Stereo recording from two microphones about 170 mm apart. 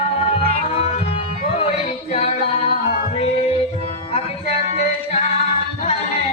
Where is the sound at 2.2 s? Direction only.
40° left (ahead or behind).